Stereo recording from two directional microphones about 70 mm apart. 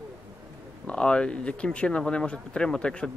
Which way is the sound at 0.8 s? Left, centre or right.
Centre.